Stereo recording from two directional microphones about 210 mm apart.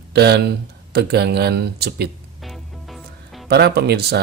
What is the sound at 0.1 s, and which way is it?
Speech, 50° right (ahead or behind).